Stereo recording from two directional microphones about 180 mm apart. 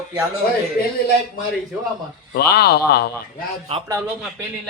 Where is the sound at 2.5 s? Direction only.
60° left (ahead or behind).